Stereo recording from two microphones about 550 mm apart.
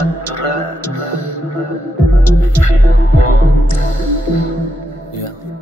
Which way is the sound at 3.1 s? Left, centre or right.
Left.